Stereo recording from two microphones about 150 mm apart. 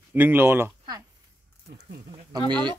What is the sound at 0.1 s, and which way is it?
Speech, 15° right (ahead or behind).